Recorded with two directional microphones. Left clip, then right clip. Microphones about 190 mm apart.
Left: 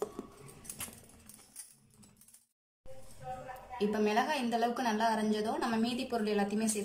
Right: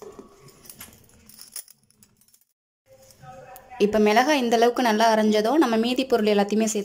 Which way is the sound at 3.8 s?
40° right (ahead or behind).